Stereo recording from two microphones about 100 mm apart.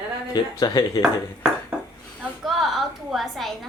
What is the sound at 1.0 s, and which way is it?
Ping, 5° right (ahead or behind).